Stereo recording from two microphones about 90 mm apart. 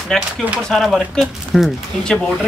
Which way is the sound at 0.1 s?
5° left (ahead or behind).